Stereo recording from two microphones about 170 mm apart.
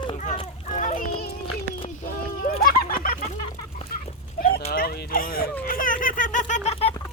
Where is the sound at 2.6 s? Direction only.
60° left (ahead or behind).